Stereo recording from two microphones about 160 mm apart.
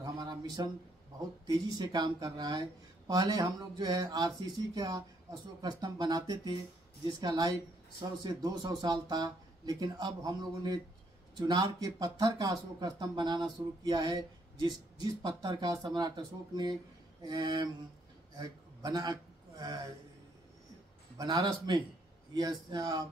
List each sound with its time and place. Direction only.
0.0 s a sound: 25° right (ahead or behind)
1.5 s a man's voice: 25° right (ahead or behind)
21.2 s speech: 25° right (ahead or behind)